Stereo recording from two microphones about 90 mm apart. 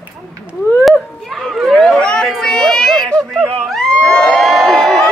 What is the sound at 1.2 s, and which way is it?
Speech, centre (ahead or behind).